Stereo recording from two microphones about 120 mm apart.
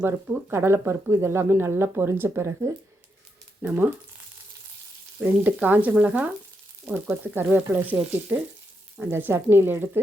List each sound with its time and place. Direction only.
0.0 s speech: 20° right (ahead or behind)
5.2 s speech: 15° right (ahead or behind)